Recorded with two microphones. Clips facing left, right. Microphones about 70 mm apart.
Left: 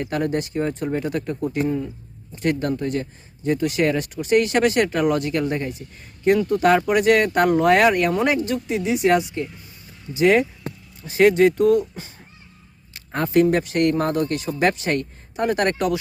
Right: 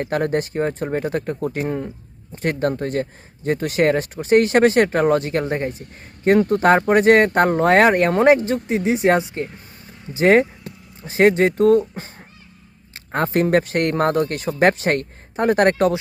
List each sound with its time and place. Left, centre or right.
0.0 s speech: right
1.6 s speech: right
2.3 s speech: right
5.8 s speech: right